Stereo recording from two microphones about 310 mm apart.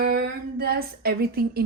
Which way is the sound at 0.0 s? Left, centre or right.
Right.